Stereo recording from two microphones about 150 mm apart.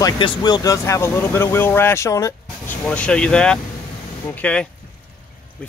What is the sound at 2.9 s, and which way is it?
Speech, 5° left (ahead or behind).